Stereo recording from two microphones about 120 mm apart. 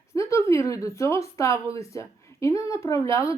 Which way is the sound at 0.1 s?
25° left (ahead or behind).